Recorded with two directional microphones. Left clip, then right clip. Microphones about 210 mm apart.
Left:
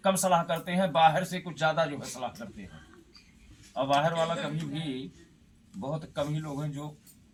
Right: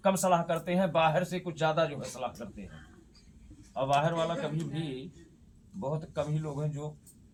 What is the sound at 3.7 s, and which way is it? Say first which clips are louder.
Speech: left 2 dB; 30° right (ahead or behind).